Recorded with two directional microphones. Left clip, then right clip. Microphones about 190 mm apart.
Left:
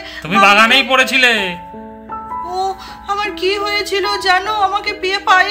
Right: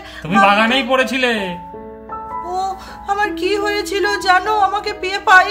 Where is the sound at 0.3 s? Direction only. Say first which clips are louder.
Left 3 dB; centre (ahead or behind).